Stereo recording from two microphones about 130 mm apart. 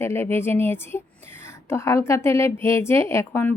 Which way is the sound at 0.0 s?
20° left (ahead or behind).